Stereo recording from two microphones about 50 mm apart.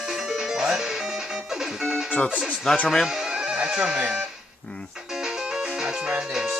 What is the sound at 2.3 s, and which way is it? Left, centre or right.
Speech, right.